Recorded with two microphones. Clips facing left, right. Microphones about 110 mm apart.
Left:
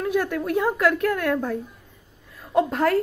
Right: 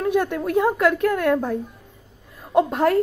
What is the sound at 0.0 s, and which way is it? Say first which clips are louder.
A woman's voice: right 3 dB; 30° right (ahead or behind).